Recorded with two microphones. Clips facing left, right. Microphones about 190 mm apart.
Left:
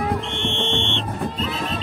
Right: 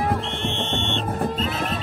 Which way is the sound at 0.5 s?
40° right (ahead or behind).